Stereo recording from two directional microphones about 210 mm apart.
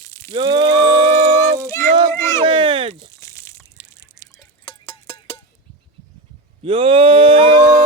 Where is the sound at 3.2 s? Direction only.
15° left (ahead or behind).